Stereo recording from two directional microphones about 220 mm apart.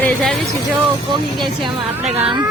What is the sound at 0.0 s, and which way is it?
Music, centre (ahead or behind).